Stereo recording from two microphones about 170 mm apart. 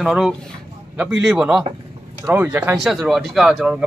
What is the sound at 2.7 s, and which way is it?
Speech, centre (ahead or behind).